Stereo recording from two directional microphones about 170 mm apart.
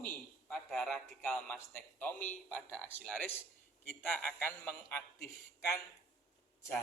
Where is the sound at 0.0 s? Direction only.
10° left (ahead or behind).